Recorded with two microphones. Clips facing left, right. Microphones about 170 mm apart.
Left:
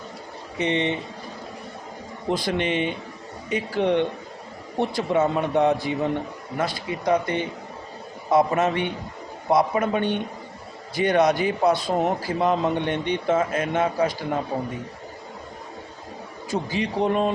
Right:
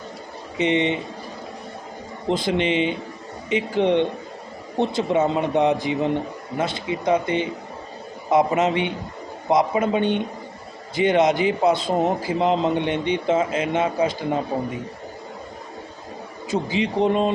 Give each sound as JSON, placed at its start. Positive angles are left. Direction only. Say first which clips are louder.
{"t": 0.6, "sound": "a man's voice", "louder": "right 3 dB", "side_deg": -20}
{"t": 2.3, "sound": "a man's voice", "louder": "right 3 dB", "side_deg": -20}
{"t": 16.5, "sound": "a man's voice", "louder": "right 3 dB", "side_deg": -20}